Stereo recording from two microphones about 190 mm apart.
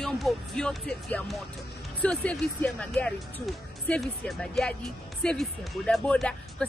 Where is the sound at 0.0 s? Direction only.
Centre (ahead or behind).